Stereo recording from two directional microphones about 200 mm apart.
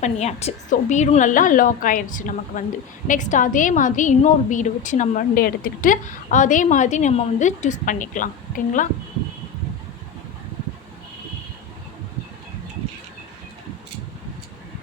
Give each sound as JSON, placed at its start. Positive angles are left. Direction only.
{"t": 0.0, "sound": "a woman's voice", "side_deg": 35}